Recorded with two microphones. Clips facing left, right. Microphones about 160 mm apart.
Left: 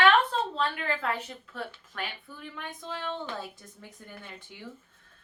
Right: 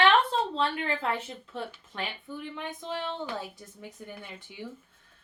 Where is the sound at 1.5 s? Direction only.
20° right (ahead or behind).